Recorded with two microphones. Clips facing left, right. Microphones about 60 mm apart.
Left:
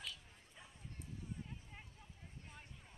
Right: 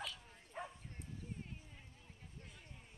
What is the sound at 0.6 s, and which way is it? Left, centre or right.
Bow-wow, right.